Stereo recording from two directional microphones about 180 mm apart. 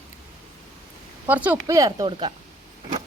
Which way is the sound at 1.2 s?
10° right (ahead or behind).